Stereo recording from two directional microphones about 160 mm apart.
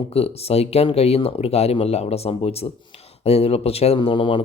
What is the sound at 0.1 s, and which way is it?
Speech, 40° left (ahead or behind).